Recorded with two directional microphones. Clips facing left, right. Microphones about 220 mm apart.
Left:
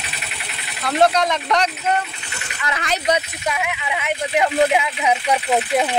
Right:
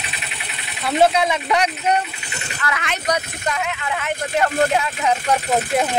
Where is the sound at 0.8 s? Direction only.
5° right (ahead or behind).